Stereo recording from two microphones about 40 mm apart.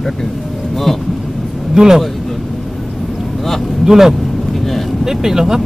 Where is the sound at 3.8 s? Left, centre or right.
Centre.